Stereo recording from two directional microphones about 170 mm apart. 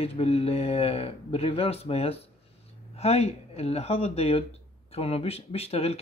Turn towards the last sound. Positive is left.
turn(degrees=35)  # may be behind; listen again after turning